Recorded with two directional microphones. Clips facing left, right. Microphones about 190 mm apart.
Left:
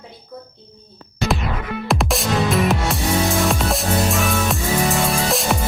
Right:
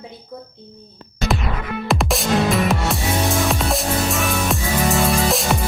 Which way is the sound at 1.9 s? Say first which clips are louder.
Right 1 dB; centre (ahead or behind).